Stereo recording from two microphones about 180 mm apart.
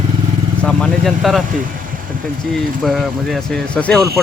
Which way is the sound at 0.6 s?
Centre (ahead or behind).